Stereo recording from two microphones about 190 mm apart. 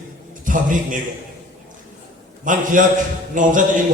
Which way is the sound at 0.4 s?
45° right (ahead or behind).